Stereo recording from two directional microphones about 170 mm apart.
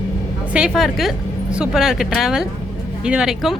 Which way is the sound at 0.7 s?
Centre (ahead or behind).